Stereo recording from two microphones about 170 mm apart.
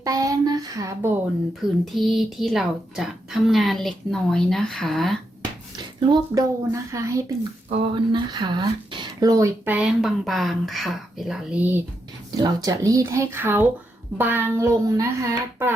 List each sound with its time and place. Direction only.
0.0 s a child's voice: 20° right (ahead or behind)
1.8 s a woman's voice: centre (ahead or behind)
5.7 s a child's voice: 25° right (ahead or behind)
7.7 s speech: 30° right (ahead or behind); by 11.8 s 10° right (ahead or behind)
12.4 s speech: 20° right (ahead or behind)